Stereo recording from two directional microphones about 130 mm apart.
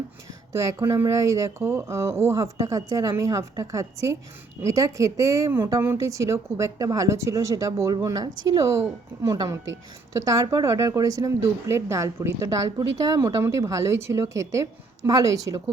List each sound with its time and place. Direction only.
0.5 s speech: 25° right (ahead or behind)